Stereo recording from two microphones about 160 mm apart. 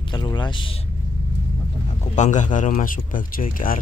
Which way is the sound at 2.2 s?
50° left (ahead or behind).